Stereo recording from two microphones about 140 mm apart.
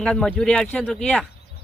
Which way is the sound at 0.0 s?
5° left (ahead or behind).